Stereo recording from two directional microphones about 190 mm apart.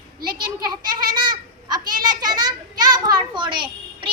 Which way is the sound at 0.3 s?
20° right (ahead or behind).